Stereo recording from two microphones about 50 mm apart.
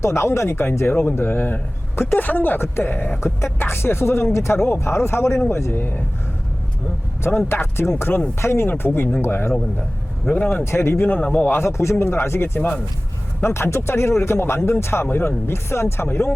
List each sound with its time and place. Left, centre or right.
0.0 s speech: left
2.1 s speech: left
2.6 s speech: left
7.3 s speech: left
10.2 s speech: left
10.6 s speech: left
11.2 s a man's voice: left
11.4 s speech: left
11.8 s speech: left
12.2 s speech: left
12.5 s speech: left
13.4 s speech: left